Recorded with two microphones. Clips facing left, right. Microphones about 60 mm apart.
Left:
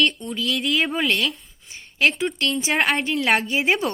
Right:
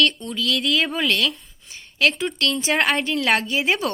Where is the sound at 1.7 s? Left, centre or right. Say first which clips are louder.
Even; left.